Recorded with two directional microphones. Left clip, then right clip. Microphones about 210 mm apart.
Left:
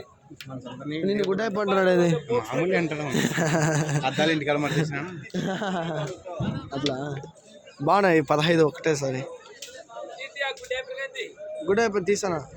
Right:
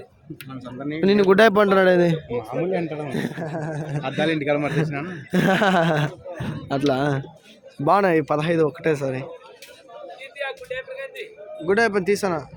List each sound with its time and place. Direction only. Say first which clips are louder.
0.9 s speech: right 8 dB; 45° right (ahead or behind)
1.6 s speech: right 4 dB; 10° right (ahead or behind)
3.3 s a sound: left 5 dB; 15° left (ahead or behind)
4.0 s speech: right 2 dB; 35° right (ahead or behind)
7.9 s speech: right 2 dB; 5° right (ahead or behind)
10.2 s a sound: even; 45° right (ahead or behind)
11.6 s speech: right 4 dB; 15° right (ahead or behind)